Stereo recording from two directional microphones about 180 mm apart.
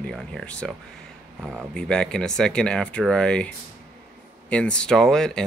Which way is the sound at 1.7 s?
5° left (ahead or behind).